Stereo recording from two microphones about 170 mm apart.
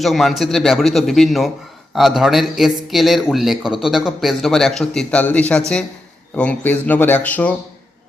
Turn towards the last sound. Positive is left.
turn(degrees=10)  # may be behind; listen again after turning